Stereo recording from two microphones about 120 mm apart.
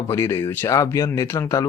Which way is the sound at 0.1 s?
25° left (ahead or behind).